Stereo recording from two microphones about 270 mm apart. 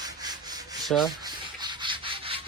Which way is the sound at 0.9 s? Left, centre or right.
Centre.